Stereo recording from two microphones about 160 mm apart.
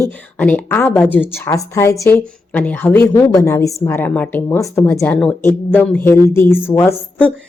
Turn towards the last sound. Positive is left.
turn(degrees=15)  # may be behind; listen again after turning